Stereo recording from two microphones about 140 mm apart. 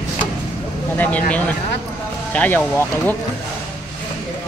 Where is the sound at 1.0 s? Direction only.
10° left (ahead or behind).